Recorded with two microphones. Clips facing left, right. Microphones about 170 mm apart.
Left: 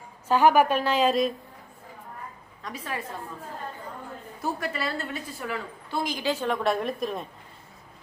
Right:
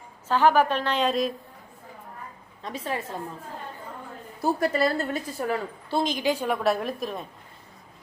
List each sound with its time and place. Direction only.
0.3 s a woman's voice: 10° left (ahead or behind)
2.6 s a woman's voice: 25° right (ahead or behind)
4.4 s a woman's voice: 40° right (ahead or behind)
5.9 s a woman's voice: 20° right (ahead or behind); by 7.3 s centre (ahead or behind)